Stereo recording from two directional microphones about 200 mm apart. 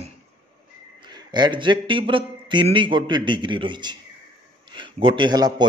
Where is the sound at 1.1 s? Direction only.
20° right (ahead or behind).